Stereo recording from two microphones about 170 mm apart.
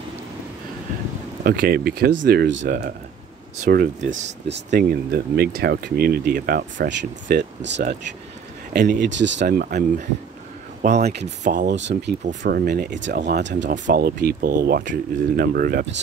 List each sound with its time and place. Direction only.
1.4 s speech: 60° right (ahead or behind); by 2.7 s 90° right
3.6 s speech: 55° right (ahead or behind)
5.1 s speech: 65° right (ahead or behind); by 8.0 s 80° right
8.7 s speech: 50° right (ahead or behind)
9.0 s speech: 90° right; by 10.0 s 45° right (ahead or behind)
11.0 s speech: 70° right (ahead or behind)
11.4 s speech: 50° right (ahead or behind)
11.7 s speech: 90° right
12.4 s speech: 65° right (ahead or behind)
13.4 s speech: 90° right
13.8 s speech: 60° right (ahead or behind)